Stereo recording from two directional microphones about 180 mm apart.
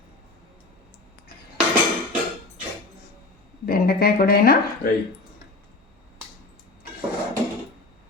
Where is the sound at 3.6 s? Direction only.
60° left (ahead or behind).